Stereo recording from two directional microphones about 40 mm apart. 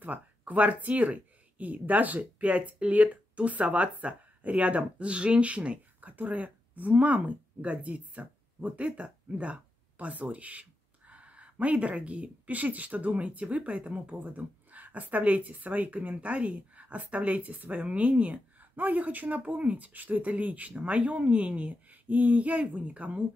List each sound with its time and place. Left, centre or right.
0.0 s speech: right
18.8 s speech: right